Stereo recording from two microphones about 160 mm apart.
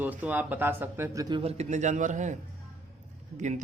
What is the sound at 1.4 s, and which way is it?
A man's voice, 40° right (ahead or behind).